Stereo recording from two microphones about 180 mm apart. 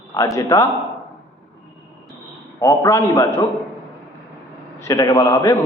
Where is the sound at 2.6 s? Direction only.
15° left (ahead or behind).